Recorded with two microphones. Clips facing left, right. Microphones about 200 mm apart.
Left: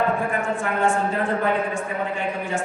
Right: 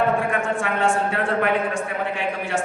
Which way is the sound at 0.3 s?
80° right.